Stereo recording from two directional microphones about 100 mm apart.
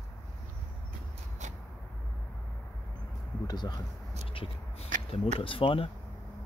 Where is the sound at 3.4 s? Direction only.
45° left (ahead or behind).